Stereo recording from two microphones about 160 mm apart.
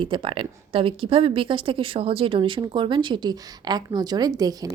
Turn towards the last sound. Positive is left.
turn(degrees=-25)  # may be behind; listen again after turning